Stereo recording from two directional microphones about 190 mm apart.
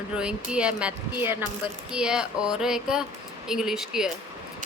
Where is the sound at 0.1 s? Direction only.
5° right (ahead or behind).